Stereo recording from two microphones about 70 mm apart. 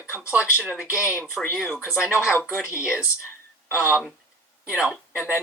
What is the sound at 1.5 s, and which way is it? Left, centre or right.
Speech, centre.